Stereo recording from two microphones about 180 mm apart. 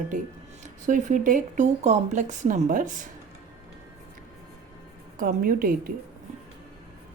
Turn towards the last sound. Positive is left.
turn(degrees=-50)  # may be behind; listen again after turning